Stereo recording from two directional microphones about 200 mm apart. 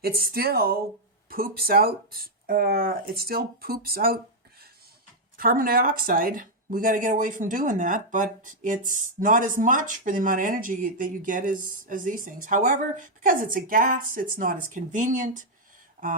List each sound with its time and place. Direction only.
0.0 s speech: 50° right (ahead or behind)
5.4 s speech: 45° right (ahead or behind)